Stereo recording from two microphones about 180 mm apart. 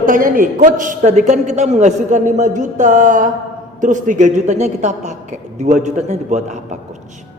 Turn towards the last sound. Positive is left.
turn(degrees=-40)  # may be behind; listen again after turning